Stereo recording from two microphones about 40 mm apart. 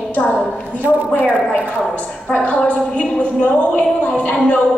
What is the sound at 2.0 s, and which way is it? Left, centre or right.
A woman's voice, left.